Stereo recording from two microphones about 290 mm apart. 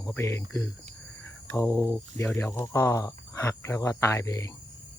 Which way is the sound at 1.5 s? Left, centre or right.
Centre.